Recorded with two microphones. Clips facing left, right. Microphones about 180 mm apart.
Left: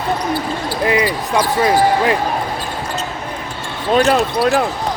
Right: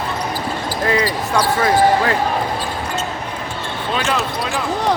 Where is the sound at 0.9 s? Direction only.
15° left (ahead or behind).